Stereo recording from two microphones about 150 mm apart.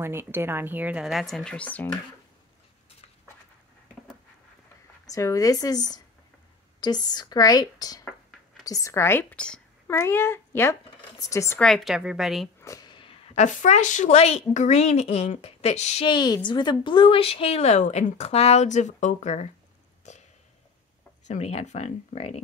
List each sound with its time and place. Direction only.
0.0 s speech: 15° right (ahead or behind); by 2.0 s 10° left (ahead or behind)
5.0 s a woman's voice: 20° left (ahead or behind)
11.6 s speech: centre (ahead or behind)
12.6 s a sound: 25° left (ahead or behind)
13.4 s a woman's voice: 55° left (ahead or behind)
16.1 s a woman's voice: 30° left (ahead or behind); by 19.5 s 50° left (ahead or behind)
20.1 s a sound: 50° left (ahead or behind)
21.3 s a woman's voice: 50° left (ahead or behind)